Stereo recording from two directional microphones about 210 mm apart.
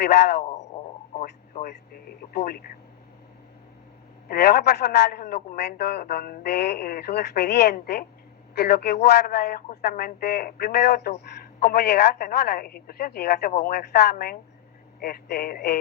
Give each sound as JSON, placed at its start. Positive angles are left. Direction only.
{"t": 0.0, "sound": "a man's voice", "side_deg": 50}
{"t": 0.4, "sound": "radio", "side_deg": 35}
{"t": 1.6, "sound": "a man's voice", "side_deg": 50}
{"t": 4.3, "sound": "a man's voice", "side_deg": 50}